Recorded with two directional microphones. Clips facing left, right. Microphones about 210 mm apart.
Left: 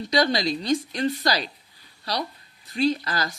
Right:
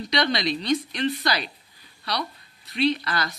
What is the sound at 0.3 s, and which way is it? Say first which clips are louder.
Speech: left 1 dB; 30° left (ahead or behind).